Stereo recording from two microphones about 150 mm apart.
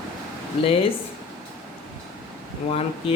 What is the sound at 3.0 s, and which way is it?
Speech, 40° left (ahead or behind).